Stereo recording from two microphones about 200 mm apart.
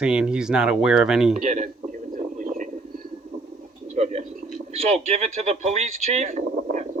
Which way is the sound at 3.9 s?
35° right (ahead or behind).